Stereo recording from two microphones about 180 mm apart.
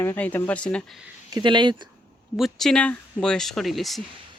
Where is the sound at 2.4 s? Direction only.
Centre (ahead or behind).